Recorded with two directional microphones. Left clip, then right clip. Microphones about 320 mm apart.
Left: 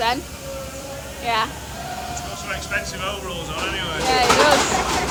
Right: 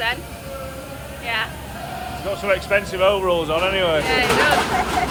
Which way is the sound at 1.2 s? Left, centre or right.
Centre.